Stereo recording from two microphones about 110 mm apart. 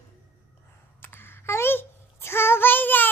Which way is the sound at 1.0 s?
20° left (ahead or behind).